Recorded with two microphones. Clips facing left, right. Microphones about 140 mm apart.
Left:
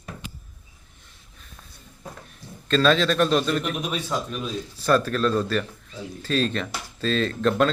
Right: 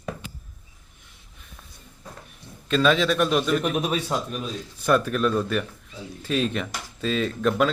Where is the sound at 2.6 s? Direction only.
10° right (ahead or behind).